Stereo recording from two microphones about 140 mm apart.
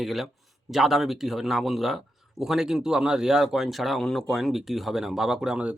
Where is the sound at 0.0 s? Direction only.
Centre (ahead or behind).